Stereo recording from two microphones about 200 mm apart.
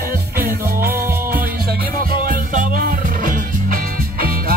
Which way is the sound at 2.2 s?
45° right (ahead or behind).